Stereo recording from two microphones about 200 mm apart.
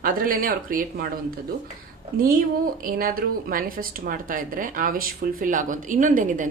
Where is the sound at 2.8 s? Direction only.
45° right (ahead or behind).